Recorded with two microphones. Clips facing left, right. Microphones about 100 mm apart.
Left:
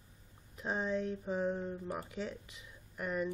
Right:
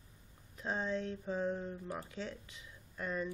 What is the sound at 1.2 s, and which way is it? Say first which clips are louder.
Speech: left 2 dB; 15° left (ahead or behind).